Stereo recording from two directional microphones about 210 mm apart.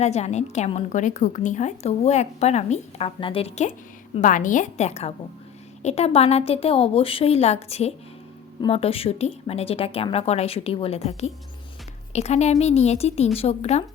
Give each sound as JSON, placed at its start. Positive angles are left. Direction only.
{"t": 0.0, "sound": "a woman's voice", "side_deg": 30}
{"t": 12.1, "sound": "a woman's voice", "side_deg": 30}